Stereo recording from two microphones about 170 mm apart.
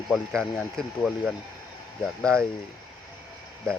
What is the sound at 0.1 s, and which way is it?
Speech, centre (ahead or behind).